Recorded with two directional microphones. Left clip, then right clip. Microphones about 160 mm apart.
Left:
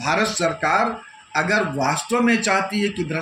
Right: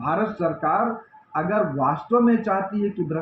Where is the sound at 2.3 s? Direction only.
45° left (ahead or behind).